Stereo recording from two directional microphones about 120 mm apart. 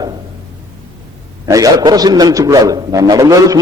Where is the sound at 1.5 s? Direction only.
30° right (ahead or behind).